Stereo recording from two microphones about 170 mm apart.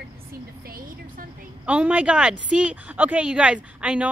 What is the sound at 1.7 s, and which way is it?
Speech, 5° right (ahead or behind).